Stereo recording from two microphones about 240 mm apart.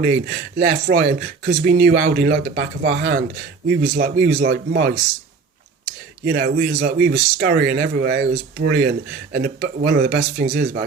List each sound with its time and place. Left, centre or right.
0.0 s speech: right
6.2 s speech: right